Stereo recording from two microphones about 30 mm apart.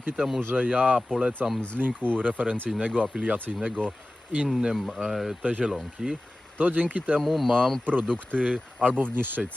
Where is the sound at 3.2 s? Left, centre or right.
Right.